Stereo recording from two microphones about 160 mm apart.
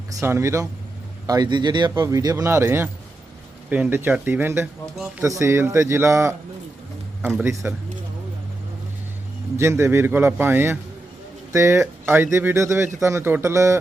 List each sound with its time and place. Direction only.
0.1 s speech: 20° right (ahead or behind)
7.4 s speech: 15° right (ahead or behind)
9.6 s speech: 15° right (ahead or behind)